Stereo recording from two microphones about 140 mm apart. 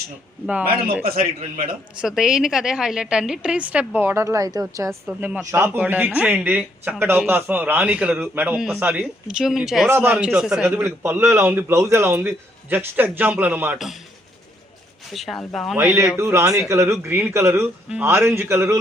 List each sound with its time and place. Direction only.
0.4 s a woman's voice: 10° right (ahead or behind)
13.7 s speech: centre (ahead or behind)
15.1 s speech: centre (ahead or behind)
15.8 s a man's voice: 20° right (ahead or behind)